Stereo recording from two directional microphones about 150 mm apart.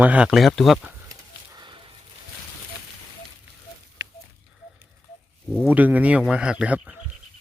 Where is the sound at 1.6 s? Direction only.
30° right (ahead or behind).